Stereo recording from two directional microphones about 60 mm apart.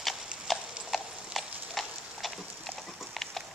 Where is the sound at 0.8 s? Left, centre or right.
Centre.